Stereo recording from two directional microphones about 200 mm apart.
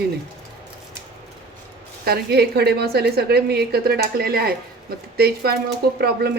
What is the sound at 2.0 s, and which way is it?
A woman's voice, 50° right (ahead or behind).